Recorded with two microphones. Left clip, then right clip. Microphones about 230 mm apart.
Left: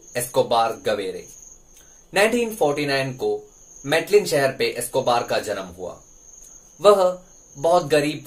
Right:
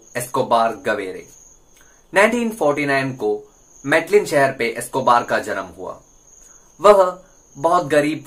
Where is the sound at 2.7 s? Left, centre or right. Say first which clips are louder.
Right 4 dB; centre.